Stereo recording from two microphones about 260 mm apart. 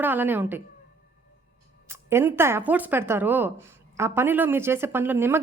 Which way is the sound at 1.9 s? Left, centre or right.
Centre.